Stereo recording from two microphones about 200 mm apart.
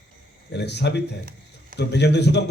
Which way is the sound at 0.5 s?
60° left (ahead or behind).